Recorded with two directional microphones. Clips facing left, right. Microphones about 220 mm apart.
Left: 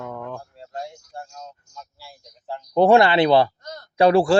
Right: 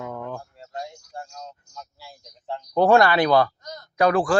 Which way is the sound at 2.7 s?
20° left (ahead or behind).